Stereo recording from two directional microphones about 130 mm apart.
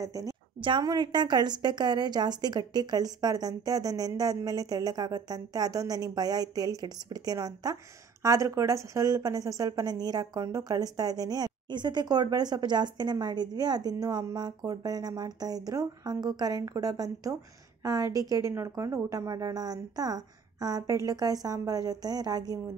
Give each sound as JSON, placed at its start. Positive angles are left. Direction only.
{"t": 0.0, "sound": "a woman's voice", "side_deg": -25}
{"t": 0.6, "sound": "a woman's voice", "side_deg": -35}